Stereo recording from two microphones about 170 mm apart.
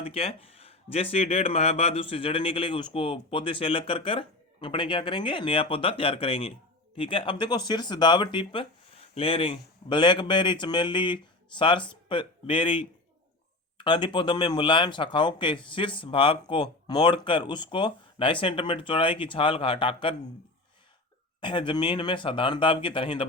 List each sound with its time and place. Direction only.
0.0 s speech: 35° left (ahead or behind)
21.4 s speech: 30° left (ahead or behind)